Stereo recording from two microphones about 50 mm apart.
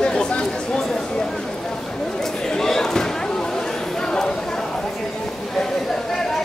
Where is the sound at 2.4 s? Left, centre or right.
Centre.